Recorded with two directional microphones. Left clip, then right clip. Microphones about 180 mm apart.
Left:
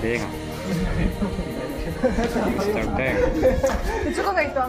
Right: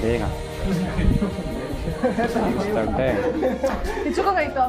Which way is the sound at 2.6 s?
25° right (ahead or behind).